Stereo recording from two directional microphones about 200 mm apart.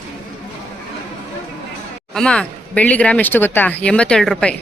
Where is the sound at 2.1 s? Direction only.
5° left (ahead or behind).